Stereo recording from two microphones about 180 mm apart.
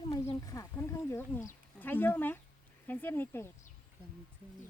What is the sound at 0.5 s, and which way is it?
Wild animals, 15° left (ahead or behind).